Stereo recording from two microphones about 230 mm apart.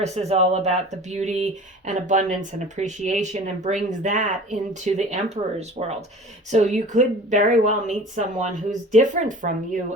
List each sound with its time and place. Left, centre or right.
0.0 s speech: right